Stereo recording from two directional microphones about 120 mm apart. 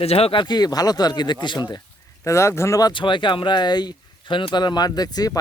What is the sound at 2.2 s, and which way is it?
Speech, 25° left (ahead or behind).